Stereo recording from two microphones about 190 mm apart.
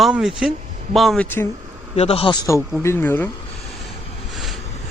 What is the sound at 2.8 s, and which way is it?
Speech, 15° left (ahead or behind).